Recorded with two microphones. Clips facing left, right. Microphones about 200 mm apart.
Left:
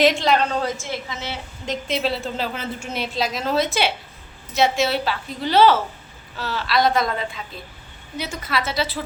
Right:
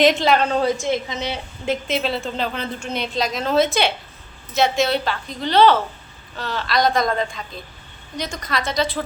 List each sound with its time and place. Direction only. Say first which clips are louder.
0.0 s a woman's voice: right 2 dB; centre (ahead or behind)
0.6 s a woman's voice: right 6 dB; 20° right (ahead or behind)
2.0 s a woman's voice: right 1 dB; 5° left (ahead or behind)